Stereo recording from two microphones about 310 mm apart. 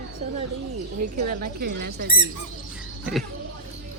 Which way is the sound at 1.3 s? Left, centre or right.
Right.